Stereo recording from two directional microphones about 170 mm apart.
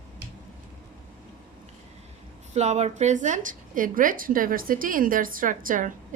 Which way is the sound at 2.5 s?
40° right (ahead or behind).